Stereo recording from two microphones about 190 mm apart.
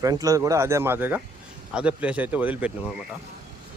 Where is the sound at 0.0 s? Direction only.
20° right (ahead or behind).